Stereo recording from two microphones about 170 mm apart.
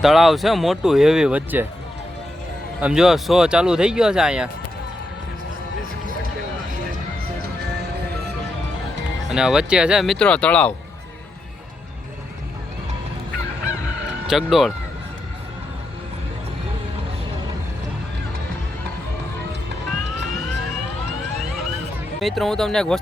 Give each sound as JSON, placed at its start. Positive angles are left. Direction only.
{"t": 0.0, "sound": "speech", "side_deg": 0}
{"t": 2.8, "sound": "speech", "side_deg": -5}
{"t": 9.3, "sound": "speech", "side_deg": -5}
{"t": 14.3, "sound": "speech", "side_deg": 0}
{"t": 22.2, "sound": "speech", "side_deg": 0}